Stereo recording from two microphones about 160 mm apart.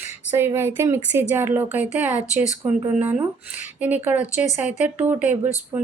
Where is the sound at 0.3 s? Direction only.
15° right (ahead or behind).